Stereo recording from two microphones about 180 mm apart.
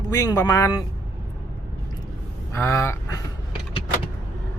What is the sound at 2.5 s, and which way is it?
Speech, 15° left (ahead or behind).